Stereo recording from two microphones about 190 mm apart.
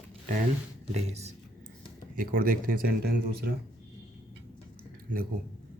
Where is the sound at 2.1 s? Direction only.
50° right (ahead or behind).